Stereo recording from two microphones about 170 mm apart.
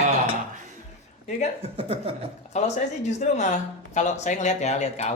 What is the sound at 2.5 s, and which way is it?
Speech, 40° left (ahead or behind).